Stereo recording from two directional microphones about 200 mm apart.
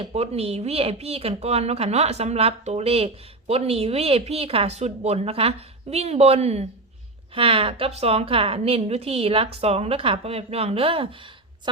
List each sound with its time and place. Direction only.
0.0 s a woman's voice: 30° right (ahead or behind)